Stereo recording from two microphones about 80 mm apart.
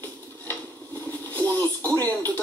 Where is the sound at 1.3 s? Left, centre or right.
Left.